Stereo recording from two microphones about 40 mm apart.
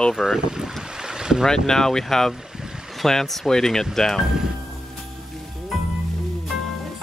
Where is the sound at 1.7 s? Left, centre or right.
Centre.